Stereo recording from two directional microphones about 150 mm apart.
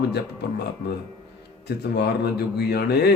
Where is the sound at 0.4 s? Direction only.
90° left.